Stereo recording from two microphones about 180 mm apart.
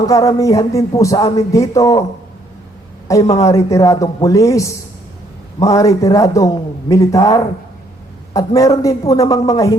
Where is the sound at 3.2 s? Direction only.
35° left (ahead or behind).